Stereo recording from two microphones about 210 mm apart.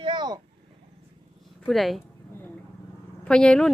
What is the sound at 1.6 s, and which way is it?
Speech, centre (ahead or behind).